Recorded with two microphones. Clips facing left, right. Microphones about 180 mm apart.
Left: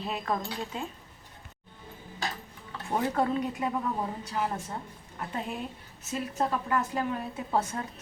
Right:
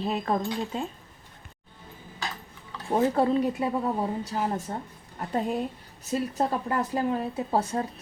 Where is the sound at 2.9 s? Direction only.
30° right (ahead or behind).